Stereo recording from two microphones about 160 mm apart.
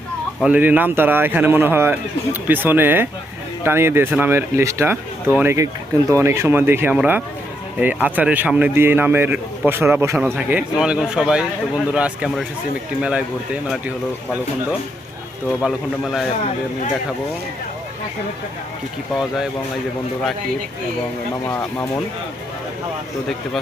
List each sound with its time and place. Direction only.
0.4 s a man's voice: 10° right (ahead or behind)
15.6 s a man's voice: centre (ahead or behind)